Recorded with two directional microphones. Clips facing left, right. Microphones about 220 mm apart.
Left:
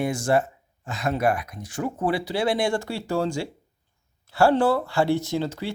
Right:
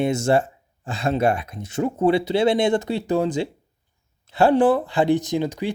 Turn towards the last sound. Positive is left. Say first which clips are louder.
# right 3 dB
turn(degrees=-15)  # may be behind; listen again after turning